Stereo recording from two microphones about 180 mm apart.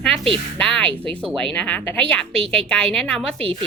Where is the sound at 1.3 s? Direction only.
5° left (ahead or behind).